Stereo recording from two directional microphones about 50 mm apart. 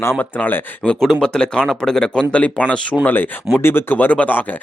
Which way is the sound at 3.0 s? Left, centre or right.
Left.